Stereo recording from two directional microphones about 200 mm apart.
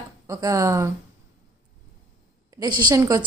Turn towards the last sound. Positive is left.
turn(degrees=-15)  # may be behind; listen again after turning